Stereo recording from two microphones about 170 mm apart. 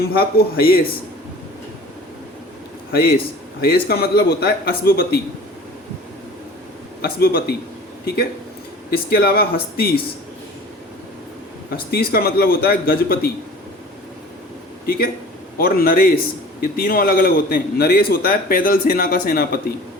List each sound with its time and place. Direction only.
0.0 s a man's voice: 65° left (ahead or behind)
2.9 s a man's voice: 60° left (ahead or behind)
7.0 s a man's voice: 65° left (ahead or behind)
11.9 s a man's voice: 65° left (ahead or behind)
14.8 s a man's voice: 60° left (ahead or behind)